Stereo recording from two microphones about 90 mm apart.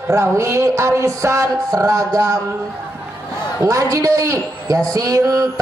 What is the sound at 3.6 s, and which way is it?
Speech, 35° right (ahead or behind).